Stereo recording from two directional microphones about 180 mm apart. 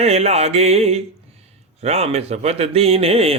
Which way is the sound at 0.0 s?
35° right (ahead or behind).